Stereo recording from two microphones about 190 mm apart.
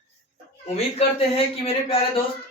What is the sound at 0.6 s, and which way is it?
Speech, 35° left (ahead or behind).